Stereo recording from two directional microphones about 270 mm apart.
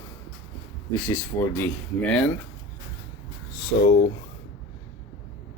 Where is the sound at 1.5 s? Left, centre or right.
Centre.